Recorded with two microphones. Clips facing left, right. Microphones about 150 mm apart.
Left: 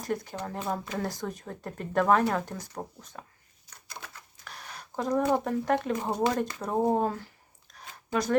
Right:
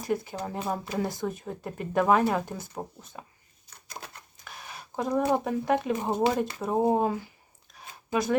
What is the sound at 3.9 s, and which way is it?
Typewriter, 30° right (ahead or behind).